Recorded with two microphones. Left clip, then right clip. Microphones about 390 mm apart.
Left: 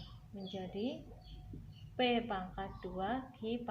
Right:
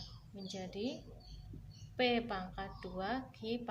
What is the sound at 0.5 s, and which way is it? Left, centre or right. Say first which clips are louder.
Speech: left 1 dB; left.